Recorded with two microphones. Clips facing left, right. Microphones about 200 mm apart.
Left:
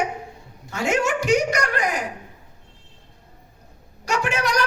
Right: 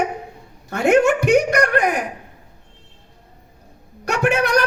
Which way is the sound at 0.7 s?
60° right (ahead or behind).